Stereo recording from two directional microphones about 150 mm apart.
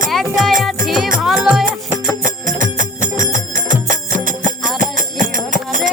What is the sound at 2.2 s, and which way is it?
Music, 60° right (ahead or behind).